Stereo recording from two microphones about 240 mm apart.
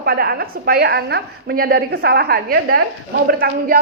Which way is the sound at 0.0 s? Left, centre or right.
Right.